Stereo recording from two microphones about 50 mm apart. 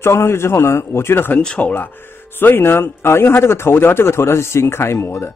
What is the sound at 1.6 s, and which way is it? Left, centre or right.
Speech, left.